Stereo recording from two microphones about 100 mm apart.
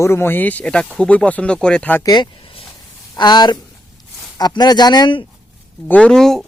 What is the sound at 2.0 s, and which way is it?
Speech, 40° left (ahead or behind).